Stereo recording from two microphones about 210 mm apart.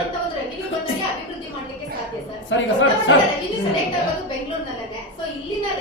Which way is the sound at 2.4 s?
65° left (ahead or behind).